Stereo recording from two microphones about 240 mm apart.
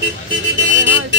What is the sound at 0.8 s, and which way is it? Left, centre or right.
Speech, right.